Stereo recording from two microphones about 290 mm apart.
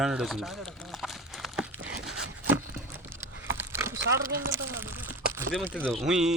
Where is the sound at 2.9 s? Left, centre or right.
Centre.